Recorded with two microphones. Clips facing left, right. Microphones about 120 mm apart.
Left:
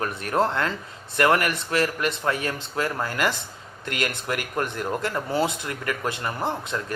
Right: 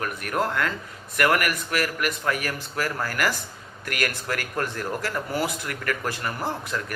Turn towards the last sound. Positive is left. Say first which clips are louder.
# left 1 dB
turn(degrees=20)  # may be behind; listen again after turning